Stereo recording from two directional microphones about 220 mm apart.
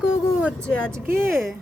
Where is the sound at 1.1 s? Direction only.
10° right (ahead or behind).